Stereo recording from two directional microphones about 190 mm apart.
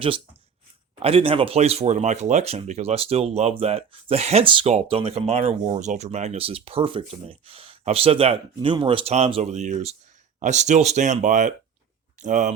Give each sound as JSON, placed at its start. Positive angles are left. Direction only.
{"t": 0.9, "sound": "speech", "side_deg": -30}